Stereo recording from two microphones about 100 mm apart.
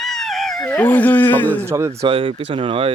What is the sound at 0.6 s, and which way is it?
Speech, 15° left (ahead or behind).